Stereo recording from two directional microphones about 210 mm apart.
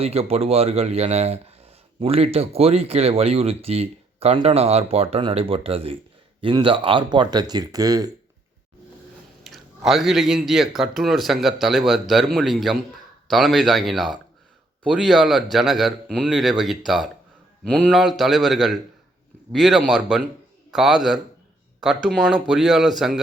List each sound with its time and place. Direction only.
0.0 s speech: 30° right (ahead or behind)
9.4 s a man's voice: centre (ahead or behind)